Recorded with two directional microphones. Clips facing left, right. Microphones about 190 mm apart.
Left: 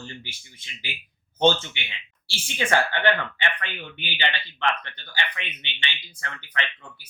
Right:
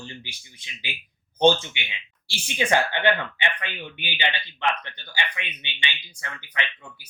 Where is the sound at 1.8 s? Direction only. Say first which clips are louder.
Right 1 dB; 15° right (ahead or behind).